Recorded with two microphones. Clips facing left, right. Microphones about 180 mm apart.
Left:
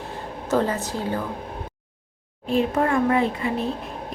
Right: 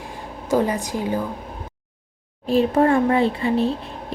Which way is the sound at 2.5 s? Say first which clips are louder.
Right 4 dB; 35° right (ahead or behind).